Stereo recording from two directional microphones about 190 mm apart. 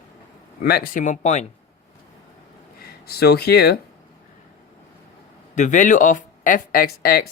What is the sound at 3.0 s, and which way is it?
Speech, 55° left (ahead or behind).